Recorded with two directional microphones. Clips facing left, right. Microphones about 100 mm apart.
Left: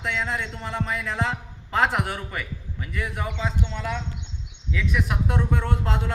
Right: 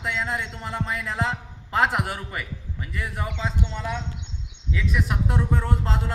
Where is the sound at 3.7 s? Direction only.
15° right (ahead or behind).